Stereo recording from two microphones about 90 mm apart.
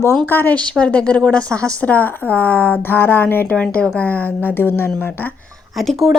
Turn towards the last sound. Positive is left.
turn(degrees=0)  # may be behind; listen again after turning